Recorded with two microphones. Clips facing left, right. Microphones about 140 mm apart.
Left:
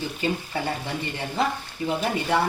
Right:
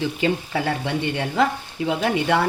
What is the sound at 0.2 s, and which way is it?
A woman's voice, 90° right.